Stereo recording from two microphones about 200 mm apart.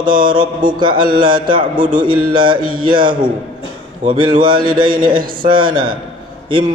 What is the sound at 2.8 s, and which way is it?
Mantra, 25° right (ahead or behind).